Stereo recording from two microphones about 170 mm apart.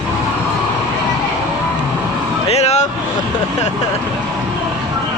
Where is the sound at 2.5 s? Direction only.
40° left (ahead or behind).